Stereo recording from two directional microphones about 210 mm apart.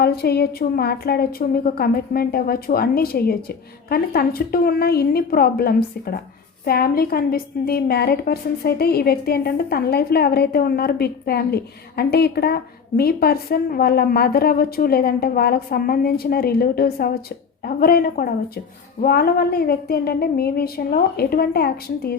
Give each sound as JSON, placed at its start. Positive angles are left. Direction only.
{"t": 0.0, "sound": "a woman's voice", "side_deg": 50}